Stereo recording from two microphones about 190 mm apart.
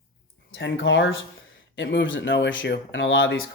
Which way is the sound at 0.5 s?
70° left (ahead or behind).